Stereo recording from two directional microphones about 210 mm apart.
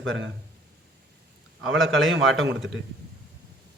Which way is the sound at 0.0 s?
60° right (ahead or behind).